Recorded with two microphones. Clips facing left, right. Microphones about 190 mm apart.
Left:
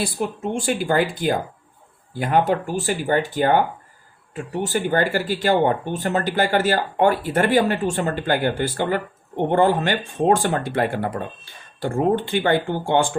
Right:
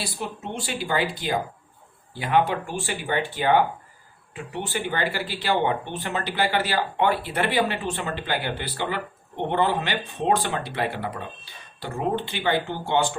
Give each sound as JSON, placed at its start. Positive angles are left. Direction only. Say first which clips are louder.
{"t": 0.0, "sound": "speech", "louder": "left 8 dB", "side_deg": 50}